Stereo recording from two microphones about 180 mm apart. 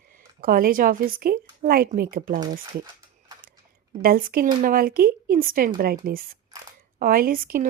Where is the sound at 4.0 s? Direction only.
55° right (ahead or behind).